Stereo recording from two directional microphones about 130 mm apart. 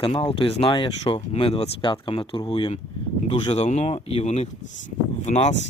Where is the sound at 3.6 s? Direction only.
55° left (ahead or behind).